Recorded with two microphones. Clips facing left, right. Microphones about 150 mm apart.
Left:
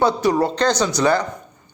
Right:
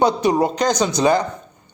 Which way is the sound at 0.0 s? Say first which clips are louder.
Right 1 dB; 20° right (ahead or behind).